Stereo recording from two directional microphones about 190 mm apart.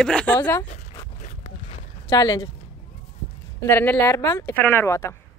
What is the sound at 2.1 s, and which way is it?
Speech, 20° left (ahead or behind).